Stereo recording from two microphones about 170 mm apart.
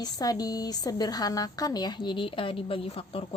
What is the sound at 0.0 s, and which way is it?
Speech, 20° left (ahead or behind).